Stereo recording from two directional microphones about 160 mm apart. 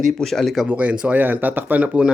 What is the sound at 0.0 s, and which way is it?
Speech, centre (ahead or behind).